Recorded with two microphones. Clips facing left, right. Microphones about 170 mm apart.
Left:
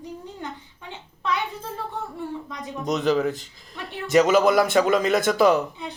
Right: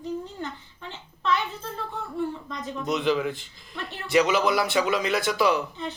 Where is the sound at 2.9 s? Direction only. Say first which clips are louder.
Left 3 dB; 40° left (ahead or behind).